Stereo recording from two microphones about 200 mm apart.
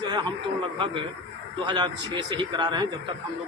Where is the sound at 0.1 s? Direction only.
25° right (ahead or behind).